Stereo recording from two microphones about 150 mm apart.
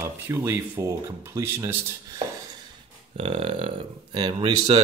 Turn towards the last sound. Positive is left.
turn(degrees=-35)  # may be behind; listen again after turning